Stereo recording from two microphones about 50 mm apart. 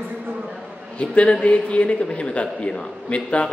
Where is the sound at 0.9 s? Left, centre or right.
Left.